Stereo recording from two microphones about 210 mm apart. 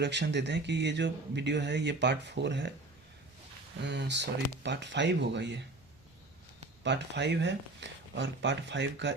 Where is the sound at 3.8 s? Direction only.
55° right (ahead or behind).